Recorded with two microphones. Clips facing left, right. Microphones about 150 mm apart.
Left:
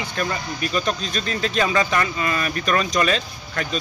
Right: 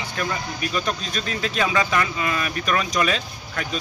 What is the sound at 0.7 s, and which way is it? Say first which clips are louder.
Speech: left 3 dB; 5° right (ahead or behind).